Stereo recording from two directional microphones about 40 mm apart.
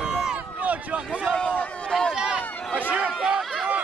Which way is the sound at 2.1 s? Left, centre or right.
Right.